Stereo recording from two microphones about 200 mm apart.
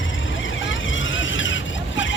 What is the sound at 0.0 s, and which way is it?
Vehicle, 70° left (ahead or behind).